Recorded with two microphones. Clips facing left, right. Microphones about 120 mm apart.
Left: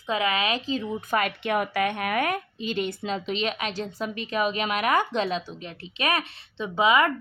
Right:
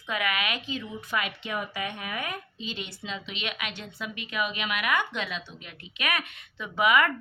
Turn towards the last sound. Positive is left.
turn(degrees=25)  # may be behind; listen again after turning